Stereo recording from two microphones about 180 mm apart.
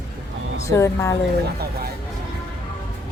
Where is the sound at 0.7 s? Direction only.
15° left (ahead or behind).